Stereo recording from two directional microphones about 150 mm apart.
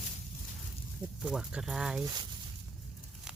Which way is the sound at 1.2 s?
5° right (ahead or behind).